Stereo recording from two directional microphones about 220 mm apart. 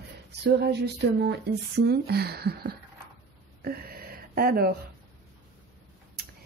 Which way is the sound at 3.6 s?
45° right (ahead or behind).